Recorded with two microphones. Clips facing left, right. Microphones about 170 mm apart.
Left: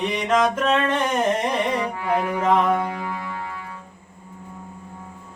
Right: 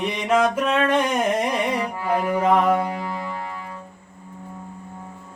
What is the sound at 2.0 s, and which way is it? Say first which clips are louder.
Music: right 3 dB; 35° right (ahead or behind).